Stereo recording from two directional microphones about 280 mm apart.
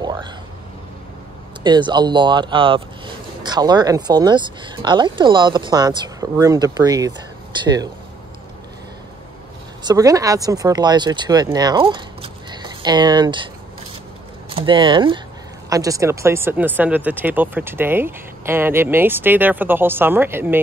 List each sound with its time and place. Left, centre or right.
0.0 s a sound: centre
1.6 s speech: centre
9.8 s speech: centre
14.5 s speech: centre